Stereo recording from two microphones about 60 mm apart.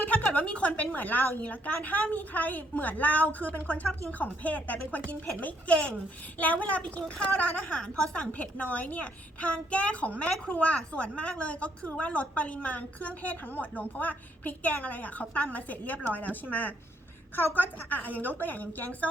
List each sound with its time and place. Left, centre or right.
0.0 s a woman's voice: left